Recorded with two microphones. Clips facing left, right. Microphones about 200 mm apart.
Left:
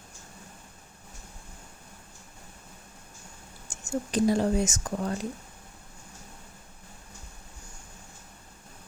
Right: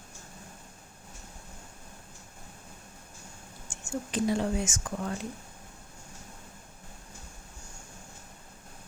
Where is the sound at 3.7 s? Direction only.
40° left (ahead or behind).